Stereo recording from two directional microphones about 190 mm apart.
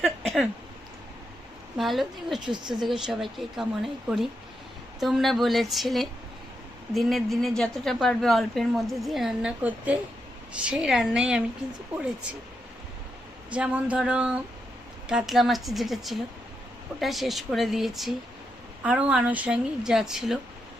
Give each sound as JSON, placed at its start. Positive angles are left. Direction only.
{"t": 0.0, "sound": "a sound", "side_deg": 0}
{"t": 1.8, "sound": "a woman's voice", "side_deg": 0}
{"t": 2.5, "sound": "speech", "side_deg": -25}
{"t": 2.8, "sound": "a woman's voice", "side_deg": 0}
{"t": 4.9, "sound": "a woman's voice", "side_deg": 0}
{"t": 13.5, "sound": "a woman's voice", "side_deg": -5}